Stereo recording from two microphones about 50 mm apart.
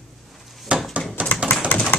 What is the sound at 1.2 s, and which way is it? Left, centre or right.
Typewriter, right.